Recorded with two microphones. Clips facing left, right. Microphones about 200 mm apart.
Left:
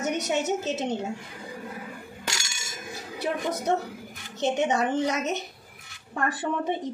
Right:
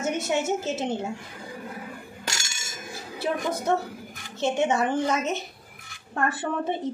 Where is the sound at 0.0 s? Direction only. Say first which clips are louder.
Right 1 dB; 20° left (ahead or behind).